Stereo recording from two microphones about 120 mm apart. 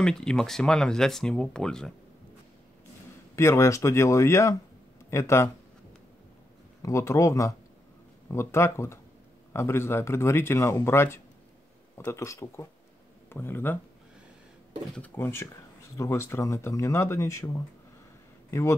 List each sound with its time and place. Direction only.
0.0 s speech: 5° left (ahead or behind)
3.3 s speech: 25° left (ahead or behind)
6.8 s speech: 25° left (ahead or behind)
15.0 s speech: 20° left (ahead or behind)